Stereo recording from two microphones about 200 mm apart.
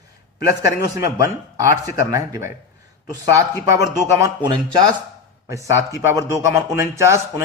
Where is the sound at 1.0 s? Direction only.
15° right (ahead or behind).